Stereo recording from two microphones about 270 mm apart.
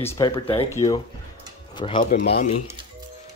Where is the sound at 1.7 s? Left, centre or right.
Centre.